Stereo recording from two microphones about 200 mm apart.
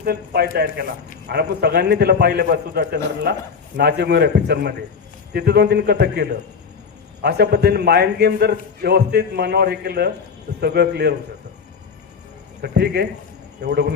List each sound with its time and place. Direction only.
0.0 s a man's voice: 50° right (ahead or behind)
12.6 s a man's voice: 55° right (ahead or behind)